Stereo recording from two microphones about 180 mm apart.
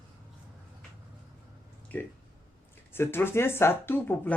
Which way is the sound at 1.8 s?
10° left (ahead or behind).